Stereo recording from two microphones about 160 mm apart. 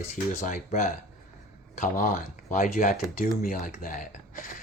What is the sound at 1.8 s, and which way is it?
Speech, 55° left (ahead or behind).